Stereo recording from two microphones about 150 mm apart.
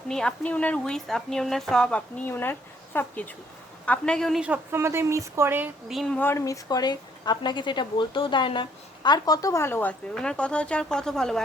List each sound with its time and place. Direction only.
0.1 s a woman's voice: 5° left (ahead or behind)
4.4 s speech: 15° right (ahead or behind)
5.9 s speech: centre (ahead or behind)
6.1 s speech: 15° left (ahead or behind)